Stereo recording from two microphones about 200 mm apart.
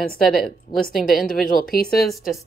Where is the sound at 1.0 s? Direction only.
45° left (ahead or behind).